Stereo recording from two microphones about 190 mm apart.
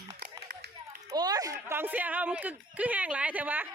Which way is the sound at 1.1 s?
20° right (ahead or behind).